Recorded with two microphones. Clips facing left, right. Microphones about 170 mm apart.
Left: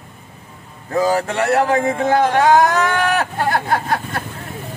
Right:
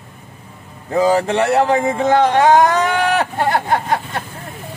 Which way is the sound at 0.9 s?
15° right (ahead or behind).